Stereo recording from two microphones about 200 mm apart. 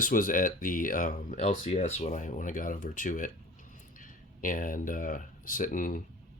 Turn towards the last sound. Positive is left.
turn(degrees=40)  # may be behind; listen again after turning